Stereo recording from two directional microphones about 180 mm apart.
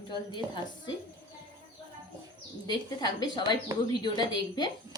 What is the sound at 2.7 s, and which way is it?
Speech, 25° left (ahead or behind).